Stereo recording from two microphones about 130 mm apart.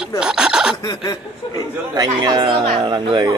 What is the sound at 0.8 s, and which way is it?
Chuckle, 30° left (ahead or behind).